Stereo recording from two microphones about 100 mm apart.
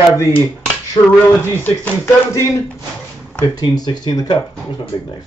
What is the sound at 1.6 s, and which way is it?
Speech, 20° left (ahead or behind).